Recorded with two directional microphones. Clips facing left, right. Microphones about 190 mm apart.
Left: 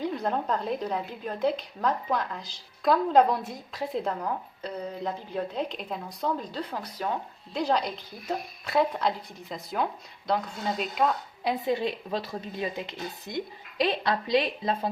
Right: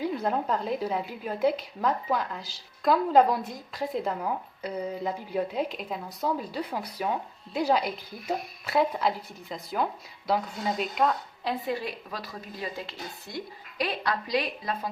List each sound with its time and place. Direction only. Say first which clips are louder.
0.0 s a woman's voice: right 1 dB; 5° right (ahead or behind)
11.4 s speech: left 4 dB; 20° left (ahead or behind)